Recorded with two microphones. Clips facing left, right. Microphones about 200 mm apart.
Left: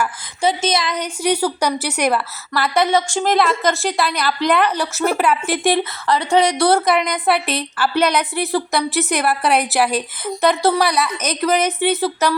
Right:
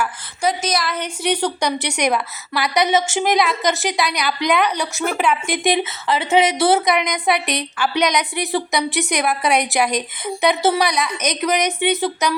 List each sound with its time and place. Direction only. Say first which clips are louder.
0.4 s speech: left 2 dB; 25° left (ahead or behind)
0.9 s a woman's voice: left 2 dB; 10° left (ahead or behind)
2.5 s a woman's voice: left 2 dB; 15° right (ahead or behind)
2.7 s a woman's voice: even; centre (ahead or behind)